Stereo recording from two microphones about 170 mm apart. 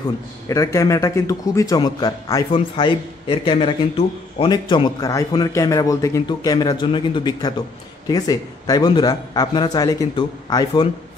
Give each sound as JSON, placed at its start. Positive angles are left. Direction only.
{"t": 0.5, "sound": "a man's voice", "side_deg": 20}